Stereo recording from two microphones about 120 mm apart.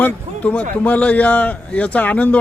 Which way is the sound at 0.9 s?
10° left (ahead or behind).